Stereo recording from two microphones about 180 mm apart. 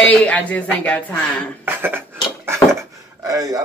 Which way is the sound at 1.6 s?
10° right (ahead or behind).